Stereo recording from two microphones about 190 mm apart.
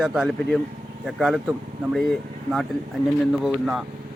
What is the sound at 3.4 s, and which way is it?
Speech, 5° right (ahead or behind).